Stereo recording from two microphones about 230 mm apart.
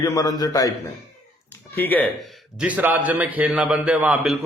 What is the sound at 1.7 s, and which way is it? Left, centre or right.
Speech, centre.